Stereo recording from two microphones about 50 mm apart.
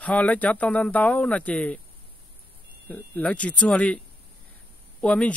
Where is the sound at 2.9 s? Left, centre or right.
Left.